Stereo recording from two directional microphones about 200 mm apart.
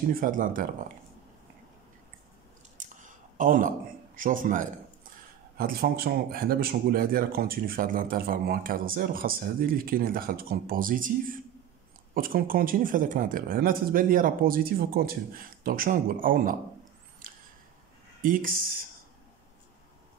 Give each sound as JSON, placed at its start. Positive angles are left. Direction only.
{"t": 0.1, "sound": "speech", "side_deg": -45}
{"t": 2.8, "sound": "a sound", "side_deg": -40}
{"t": 5.6, "sound": "speech", "side_deg": -50}
{"t": 18.2, "sound": "speech", "side_deg": -45}